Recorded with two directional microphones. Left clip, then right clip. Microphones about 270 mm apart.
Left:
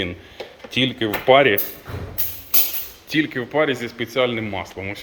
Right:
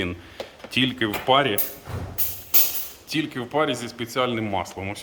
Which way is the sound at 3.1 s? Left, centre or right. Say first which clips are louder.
Left 5 dB; centre.